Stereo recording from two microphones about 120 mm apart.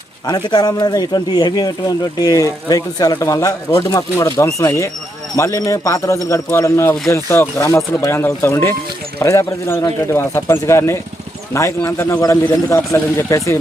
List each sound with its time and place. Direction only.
0.4 s speech: 35° left (ahead or behind)